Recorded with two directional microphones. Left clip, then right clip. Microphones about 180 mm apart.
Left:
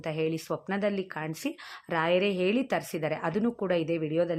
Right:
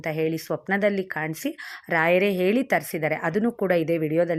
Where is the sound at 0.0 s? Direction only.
15° right (ahead or behind).